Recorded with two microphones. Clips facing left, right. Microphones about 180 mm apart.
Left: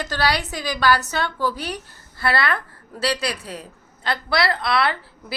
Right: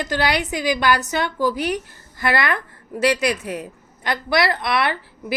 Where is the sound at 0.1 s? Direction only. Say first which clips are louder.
Right 2 dB; 20° right (ahead or behind).